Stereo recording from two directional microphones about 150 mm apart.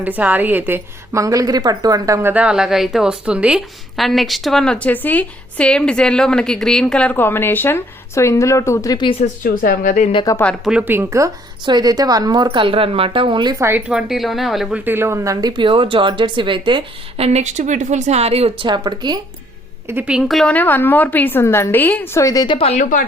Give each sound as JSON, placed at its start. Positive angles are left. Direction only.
{"t": 0.0, "sound": "a woman's voice", "side_deg": -10}
{"t": 2.3, "sound": "a woman's voice", "side_deg": -5}
{"t": 9.2, "sound": "a woman's voice", "side_deg": 65}
{"t": 10.3, "sound": "speech", "side_deg": 20}
{"t": 10.6, "sound": "speech", "side_deg": -5}
{"t": 11.6, "sound": "a woman's voice", "side_deg": -30}
{"t": 13.7, "sound": "a woman's voice", "side_deg": -10}
{"t": 14.8, "sound": "speech", "side_deg": -15}
{"t": 19.9, "sound": "a woman's voice", "side_deg": -10}
{"t": 22.5, "sound": "speech", "side_deg": 40}
{"t": 22.8, "sound": "a woman's voice", "side_deg": 60}